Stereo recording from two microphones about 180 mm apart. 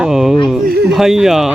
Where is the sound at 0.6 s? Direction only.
60° right (ahead or behind).